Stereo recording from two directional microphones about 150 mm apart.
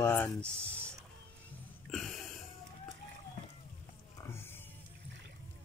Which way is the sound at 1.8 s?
Centre (ahead or behind).